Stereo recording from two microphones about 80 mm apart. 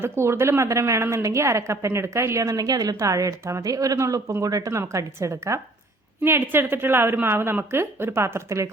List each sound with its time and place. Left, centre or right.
0.0 s a woman's voice: right